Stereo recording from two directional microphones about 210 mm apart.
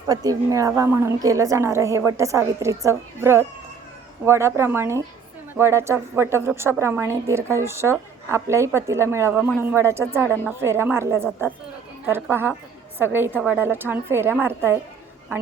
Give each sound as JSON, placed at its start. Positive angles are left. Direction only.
{"t": 0.1, "sound": "a woman's voice", "side_deg": -15}